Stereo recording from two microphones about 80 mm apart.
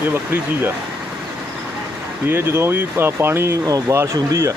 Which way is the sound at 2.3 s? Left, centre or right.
Right.